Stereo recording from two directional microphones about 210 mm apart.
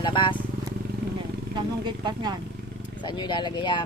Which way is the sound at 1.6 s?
20° right (ahead or behind).